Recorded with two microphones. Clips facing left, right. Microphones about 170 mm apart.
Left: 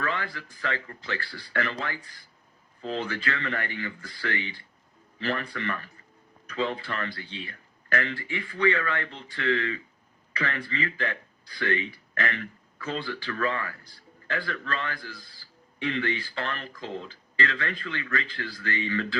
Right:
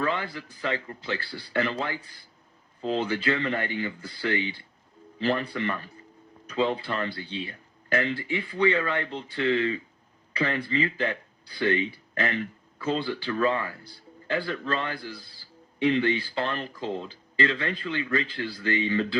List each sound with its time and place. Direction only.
0.0 s speech: 25° right (ahead or behind)
2.8 s speech: 30° right (ahead or behind)